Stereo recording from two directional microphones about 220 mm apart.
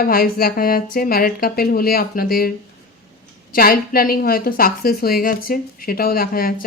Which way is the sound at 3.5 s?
40° left (ahead or behind).